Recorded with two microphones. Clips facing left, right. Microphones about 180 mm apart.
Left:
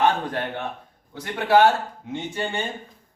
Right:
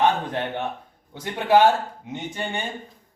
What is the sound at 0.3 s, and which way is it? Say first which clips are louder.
A man's voice: right 1 dB; 20° right (ahead or behind).